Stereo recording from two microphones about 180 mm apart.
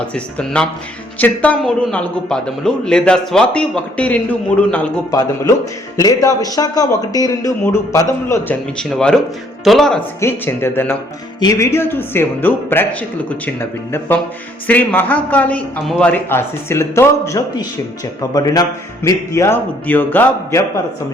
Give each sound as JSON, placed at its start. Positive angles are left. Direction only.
{"t": 0.1, "sound": "a man's voice", "side_deg": 5}
{"t": 6.0, "sound": "speech", "side_deg": 20}
{"t": 8.8, "sound": "a man's voice", "side_deg": 5}
{"t": 10.2, "sound": "speech", "side_deg": 15}